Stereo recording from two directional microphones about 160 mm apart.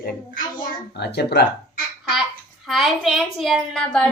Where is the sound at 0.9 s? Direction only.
90° left.